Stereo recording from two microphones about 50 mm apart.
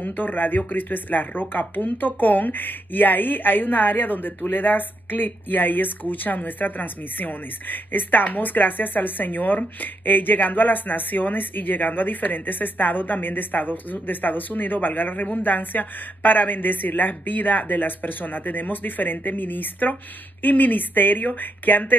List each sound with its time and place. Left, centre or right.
0.0 s speech: left